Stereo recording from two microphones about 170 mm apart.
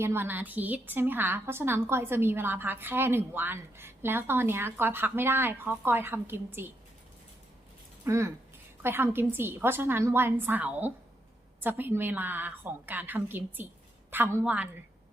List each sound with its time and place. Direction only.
0.0 s a woman's voice: 15° right (ahead or behind)
8.0 s a woman's voice: 15° right (ahead or behind)